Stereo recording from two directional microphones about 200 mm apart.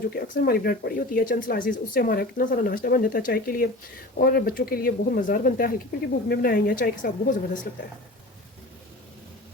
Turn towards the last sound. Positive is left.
turn(degrees=45)  # may be behind; listen again after turning